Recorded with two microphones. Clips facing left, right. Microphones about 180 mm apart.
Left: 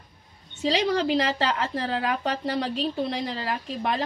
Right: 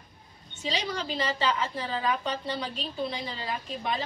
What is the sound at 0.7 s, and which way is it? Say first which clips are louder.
A woman's voice: left 9 dB; 75° left (ahead or behind).